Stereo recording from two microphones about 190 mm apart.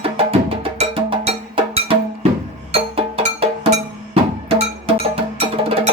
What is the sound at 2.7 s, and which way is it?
Music, 30° right (ahead or behind).